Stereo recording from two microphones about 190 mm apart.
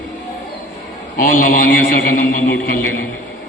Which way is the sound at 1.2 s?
45° left (ahead or behind).